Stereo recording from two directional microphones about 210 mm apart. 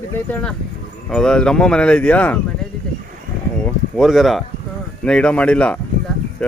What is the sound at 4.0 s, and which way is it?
Speech, centre (ahead or behind).